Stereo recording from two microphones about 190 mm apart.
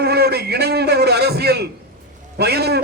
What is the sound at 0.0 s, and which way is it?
A man's voice, 60° right (ahead or behind).